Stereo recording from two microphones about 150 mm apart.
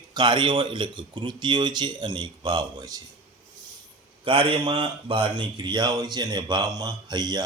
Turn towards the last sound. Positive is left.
turn(degrees=-25)  # may be behind; listen again after turning